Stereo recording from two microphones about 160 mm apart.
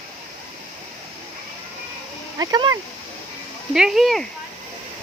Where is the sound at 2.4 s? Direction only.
25° right (ahead or behind).